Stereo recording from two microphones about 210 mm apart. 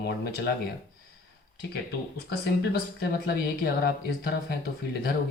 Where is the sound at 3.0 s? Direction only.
50° left (ahead or behind).